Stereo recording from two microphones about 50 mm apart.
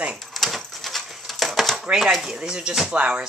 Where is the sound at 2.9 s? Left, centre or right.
Right.